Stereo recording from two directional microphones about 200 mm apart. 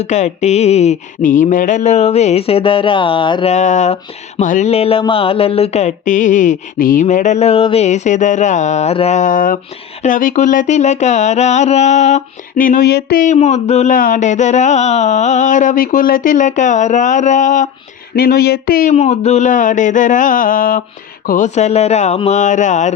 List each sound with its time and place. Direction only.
0.0 s mantra: 35° left (ahead or behind)
3.5 s mantra: 35° left (ahead or behind)
18.2 s mantra: 50° left (ahead or behind)